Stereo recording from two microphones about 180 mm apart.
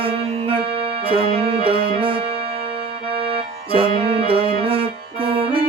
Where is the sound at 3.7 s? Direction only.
30° right (ahead or behind).